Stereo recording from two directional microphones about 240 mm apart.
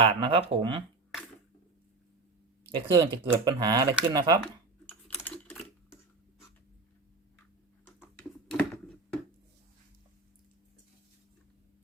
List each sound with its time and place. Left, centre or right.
0.0 s speech: right
2.7 s speech: centre
4.9 s typing: centre
8.4 s a sound: centre